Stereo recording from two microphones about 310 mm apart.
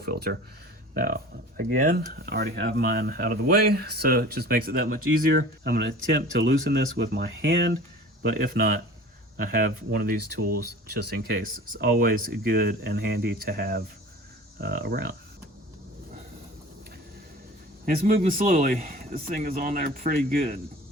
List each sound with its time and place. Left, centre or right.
0.0 s speech: right
17.8 s speech: right